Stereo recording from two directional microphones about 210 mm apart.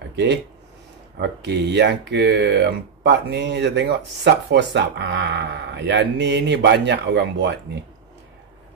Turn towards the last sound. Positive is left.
turn(degrees=-55)  # may be behind; listen again after turning